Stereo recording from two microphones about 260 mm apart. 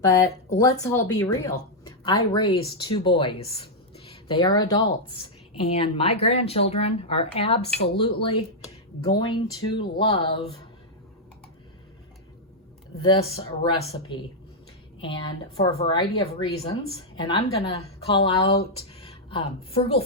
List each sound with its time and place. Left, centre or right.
0.0 s speech: centre
13.0 s a woman's voice: centre